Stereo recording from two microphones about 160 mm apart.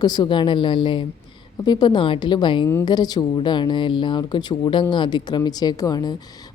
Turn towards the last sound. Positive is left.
turn(degrees=25)  # may be behind; listen again after turning